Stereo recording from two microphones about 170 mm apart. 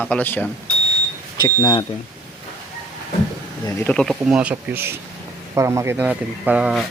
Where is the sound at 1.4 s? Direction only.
25° left (ahead or behind).